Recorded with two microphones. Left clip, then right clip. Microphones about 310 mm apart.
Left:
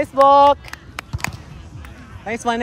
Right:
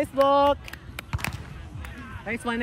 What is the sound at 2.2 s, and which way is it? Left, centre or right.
Speech, centre.